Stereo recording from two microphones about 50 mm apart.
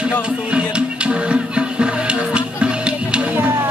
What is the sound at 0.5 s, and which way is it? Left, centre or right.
Music, right.